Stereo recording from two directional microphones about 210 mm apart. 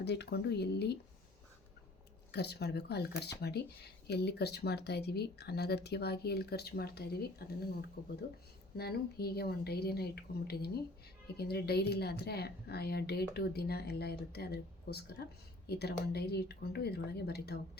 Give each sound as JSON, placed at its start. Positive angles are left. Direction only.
{"t": 0.0, "sound": "speech", "side_deg": 55}
{"t": 2.3, "sound": "speech", "side_deg": 50}